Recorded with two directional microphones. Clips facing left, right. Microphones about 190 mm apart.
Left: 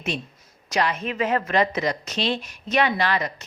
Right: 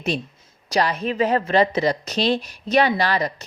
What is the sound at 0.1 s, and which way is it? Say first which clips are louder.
A woman's voice: right 4 dB; 35° right (ahead or behind).